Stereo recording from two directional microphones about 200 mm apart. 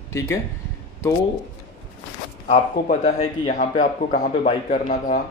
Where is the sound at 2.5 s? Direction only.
35° left (ahead or behind).